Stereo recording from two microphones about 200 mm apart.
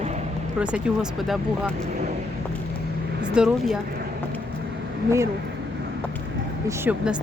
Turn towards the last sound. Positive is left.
turn(degrees=-10)  # may be behind; listen again after turning